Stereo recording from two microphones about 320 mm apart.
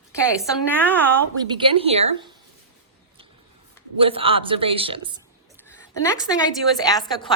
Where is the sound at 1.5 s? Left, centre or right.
Centre.